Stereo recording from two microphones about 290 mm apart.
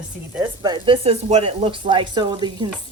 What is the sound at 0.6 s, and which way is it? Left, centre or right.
Speech, centre.